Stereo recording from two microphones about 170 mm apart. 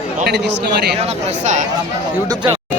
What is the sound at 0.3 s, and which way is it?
Speech, 85° right.